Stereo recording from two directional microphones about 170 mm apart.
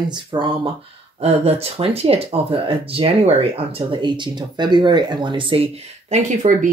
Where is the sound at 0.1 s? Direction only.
30° right (ahead or behind).